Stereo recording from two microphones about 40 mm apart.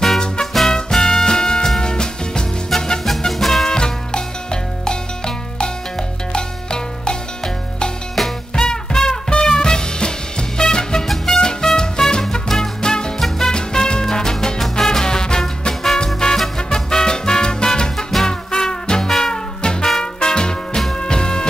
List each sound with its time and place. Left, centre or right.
0.5 s swing music: centre
0.9 s music: centre
2.7 s music: centre
3.6 s music: centre
8.2 s music: centre
8.5 s music: centre
13.6 s music: left